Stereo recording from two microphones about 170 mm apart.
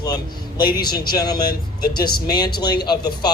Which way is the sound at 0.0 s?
25° left (ahead or behind).